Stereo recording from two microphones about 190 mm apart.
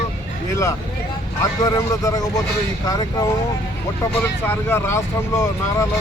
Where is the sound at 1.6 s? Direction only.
20° left (ahead or behind).